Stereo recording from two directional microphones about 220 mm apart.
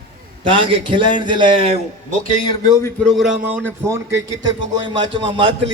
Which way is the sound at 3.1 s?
5° right (ahead or behind).